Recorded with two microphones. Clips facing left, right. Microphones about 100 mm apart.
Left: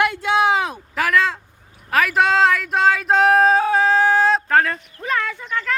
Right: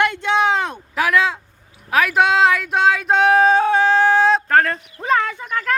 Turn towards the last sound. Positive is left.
turn(degrees=-10)  # may be behind; listen again after turning